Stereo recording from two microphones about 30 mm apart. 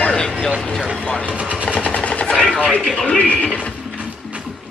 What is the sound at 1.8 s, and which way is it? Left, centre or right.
Machine gun, left.